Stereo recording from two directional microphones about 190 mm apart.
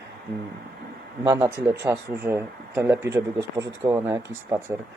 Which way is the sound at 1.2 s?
15° right (ahead or behind).